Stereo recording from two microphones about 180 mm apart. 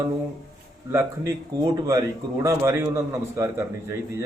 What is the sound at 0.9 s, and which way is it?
A man's voice, 15° right (ahead or behind).